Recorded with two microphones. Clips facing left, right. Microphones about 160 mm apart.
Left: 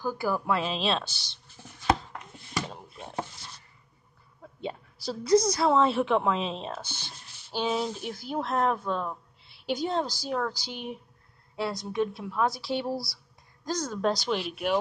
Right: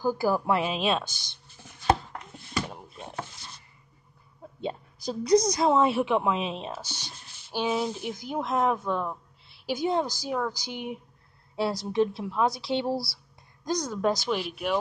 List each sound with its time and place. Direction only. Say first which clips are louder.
0.0 s a woman's voice: right 4 dB; 30° right (ahead or behind)
0.5 s a woman's voice: right 2 dB; 15° right (ahead or behind)
1.1 s speech: even; 50° right (ahead or behind)
5.0 s a woman's voice: right 1 dB; 15° right (ahead or behind)
8.1 s a woman's voice: right 1 dB; 15° right (ahead or behind)
9.1 s a woman's voice: right 1 dB; 5° right (ahead or behind)
11.5 s speech: right 4 dB; 30° right (ahead or behind)
13.7 s a woman's voice: right 1 dB; 15° right (ahead or behind)
14.3 s speech: even; centre (ahead or behind)